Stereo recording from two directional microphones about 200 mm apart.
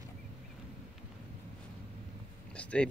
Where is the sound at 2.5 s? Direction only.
5° left (ahead or behind).